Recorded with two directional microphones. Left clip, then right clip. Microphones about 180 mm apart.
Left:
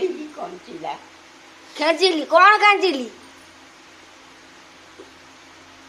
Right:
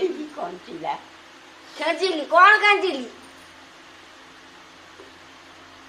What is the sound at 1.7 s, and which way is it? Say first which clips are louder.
A woman's voice: left 5 dB; 60° left (ahead or behind).